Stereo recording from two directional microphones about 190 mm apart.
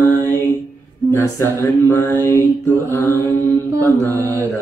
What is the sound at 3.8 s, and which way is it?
Mantra, 10° left (ahead or behind).